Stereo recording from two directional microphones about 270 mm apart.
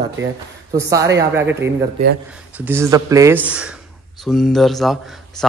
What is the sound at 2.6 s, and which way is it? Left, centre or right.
Speech, centre.